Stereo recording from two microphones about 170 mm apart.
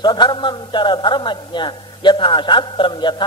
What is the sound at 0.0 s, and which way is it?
A man's voice, 25° left (ahead or behind).